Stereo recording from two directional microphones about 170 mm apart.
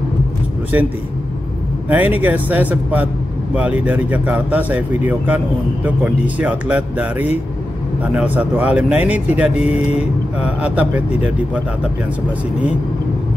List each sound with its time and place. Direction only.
1.9 s speech: 10° right (ahead or behind)
9.7 s speech: 40° left (ahead or behind)
10.4 s speech: 5° right (ahead or behind)